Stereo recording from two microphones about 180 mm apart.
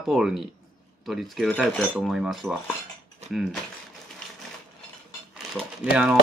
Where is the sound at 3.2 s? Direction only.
35° right (ahead or behind).